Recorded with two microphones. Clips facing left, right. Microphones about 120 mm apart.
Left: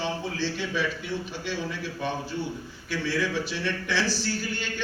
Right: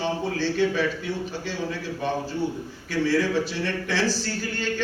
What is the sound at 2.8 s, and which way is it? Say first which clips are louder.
Speech: right 5 dB; 40° right (ahead or behind).